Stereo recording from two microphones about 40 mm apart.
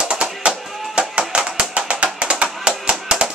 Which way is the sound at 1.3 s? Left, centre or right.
Right.